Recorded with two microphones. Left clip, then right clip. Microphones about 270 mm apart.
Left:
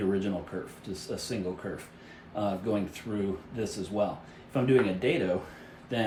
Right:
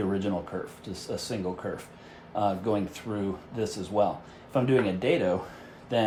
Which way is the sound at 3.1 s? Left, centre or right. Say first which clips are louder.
Right 1 dB; right.